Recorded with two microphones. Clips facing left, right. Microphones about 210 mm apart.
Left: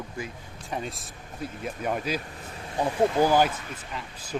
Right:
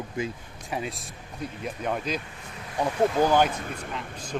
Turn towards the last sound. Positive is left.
turn(degrees=5)  # may be behind; listen again after turning